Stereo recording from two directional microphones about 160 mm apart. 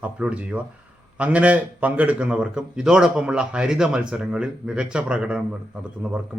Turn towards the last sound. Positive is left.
turn(degrees=-5)  # may be behind; listen again after turning